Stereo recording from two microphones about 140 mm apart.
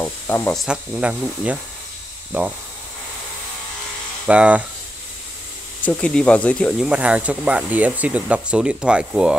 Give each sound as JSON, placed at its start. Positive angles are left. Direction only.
{"t": 0.0, "sound": "speech", "side_deg": 15}
{"t": 0.5, "sound": "speech", "side_deg": 0}
{"t": 0.9, "sound": "speech", "side_deg": -10}
{"t": 4.3, "sound": "speech", "side_deg": -10}
{"t": 5.9, "sound": "speech", "side_deg": 5}
{"t": 6.8, "sound": "speech", "side_deg": -10}